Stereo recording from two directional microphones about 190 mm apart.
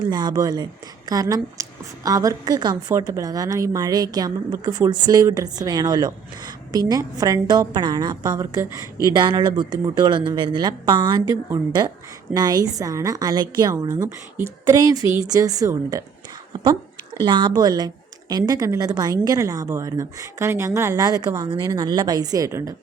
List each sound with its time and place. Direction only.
0.0 s a woman's voice: 20° right (ahead or behind)
17.2 s a woman's voice: 25° right (ahead or behind)